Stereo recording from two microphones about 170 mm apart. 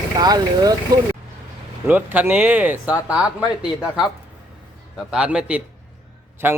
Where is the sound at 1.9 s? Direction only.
10° right (ahead or behind).